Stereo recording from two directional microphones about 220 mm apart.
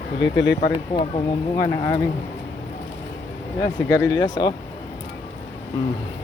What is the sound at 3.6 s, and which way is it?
Speech, 15° left (ahead or behind).